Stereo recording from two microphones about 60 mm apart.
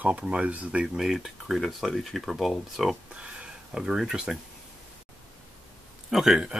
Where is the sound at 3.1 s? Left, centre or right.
Centre.